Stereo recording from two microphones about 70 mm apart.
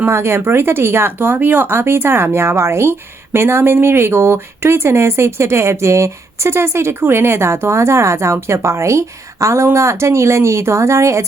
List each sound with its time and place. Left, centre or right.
0.1 s speech: right